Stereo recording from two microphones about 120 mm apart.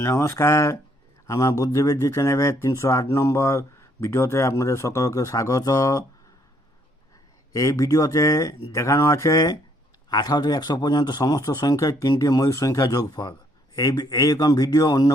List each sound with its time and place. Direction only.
0.0 s speech: 20° left (ahead or behind)
7.5 s a man's voice: 30° left (ahead or behind)